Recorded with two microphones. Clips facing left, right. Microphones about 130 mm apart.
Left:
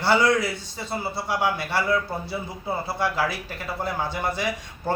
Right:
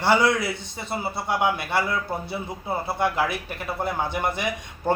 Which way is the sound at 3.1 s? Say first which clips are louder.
Right 1 dB; 20° right (ahead or behind).